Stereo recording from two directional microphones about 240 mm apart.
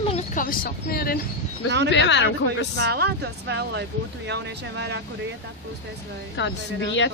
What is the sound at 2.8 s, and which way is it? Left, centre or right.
Speech, right.